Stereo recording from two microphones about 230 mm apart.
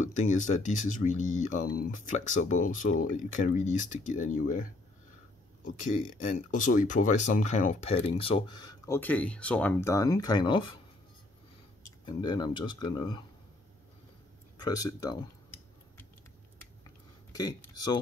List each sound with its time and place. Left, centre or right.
0.0 s speech: left
12.1 s speech: centre
14.6 s speech: centre
17.3 s speech: centre